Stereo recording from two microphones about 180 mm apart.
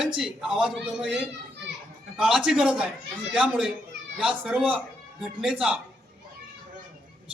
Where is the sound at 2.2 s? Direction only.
5° right (ahead or behind).